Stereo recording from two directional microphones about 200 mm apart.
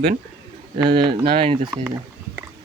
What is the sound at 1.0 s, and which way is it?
Speech, 20° right (ahead or behind).